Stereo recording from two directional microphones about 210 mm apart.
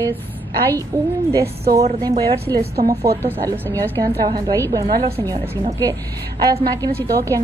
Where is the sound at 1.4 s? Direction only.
50° right (ahead or behind).